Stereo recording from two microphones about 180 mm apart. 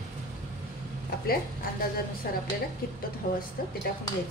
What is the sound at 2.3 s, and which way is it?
Speech, 60° left (ahead or behind).